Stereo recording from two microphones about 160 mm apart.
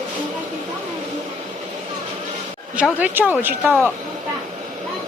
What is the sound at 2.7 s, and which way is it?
Speech, 10° right (ahead or behind).